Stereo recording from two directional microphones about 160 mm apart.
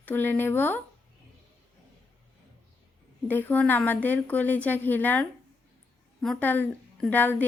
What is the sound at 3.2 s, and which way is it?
A woman's voice, 10° left (ahead or behind).